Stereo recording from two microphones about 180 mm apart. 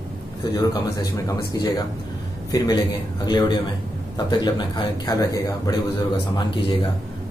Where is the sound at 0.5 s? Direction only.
20° left (ahead or behind).